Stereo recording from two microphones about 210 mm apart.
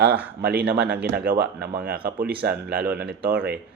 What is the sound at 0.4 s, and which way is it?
Speech, 50° right (ahead or behind).